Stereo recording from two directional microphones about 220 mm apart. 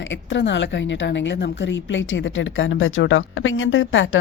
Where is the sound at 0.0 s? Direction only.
55° left (ahead or behind).